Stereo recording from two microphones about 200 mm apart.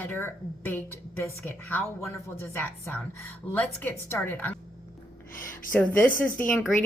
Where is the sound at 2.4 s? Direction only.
10° left (ahead or behind).